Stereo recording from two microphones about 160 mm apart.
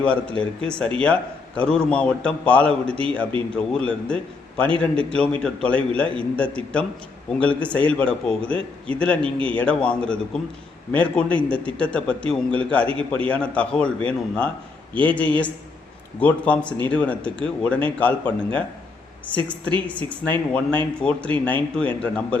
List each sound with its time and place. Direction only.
0.0 s speech: 5° left (ahead or behind)
12.9 s a man's voice: 35° right (ahead or behind)
13.2 s speech: 10° left (ahead or behind)